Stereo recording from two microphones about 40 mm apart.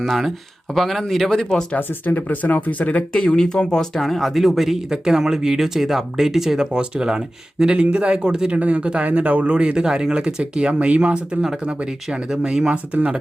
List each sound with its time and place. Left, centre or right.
0.0 s speech: centre
1.9 s speech: left
3.1 s speech: centre
4.9 s speech: centre
6.7 s speech: right
7.8 s speech: right
8.5 s speech: right